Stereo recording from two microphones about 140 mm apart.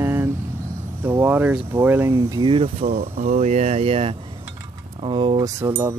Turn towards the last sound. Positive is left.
turn(degrees=-20)  # may be behind; listen again after turning